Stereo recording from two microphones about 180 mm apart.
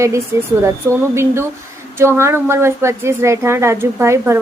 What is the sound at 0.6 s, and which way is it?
A woman's voice, 15° right (ahead or behind).